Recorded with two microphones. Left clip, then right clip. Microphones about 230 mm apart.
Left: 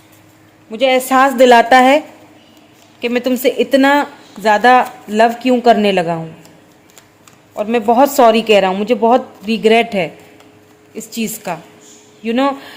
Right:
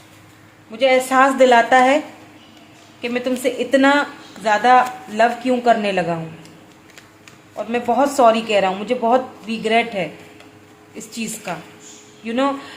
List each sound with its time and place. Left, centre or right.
0.7 s speech: left
3.0 s speech: left
7.5 s speech: left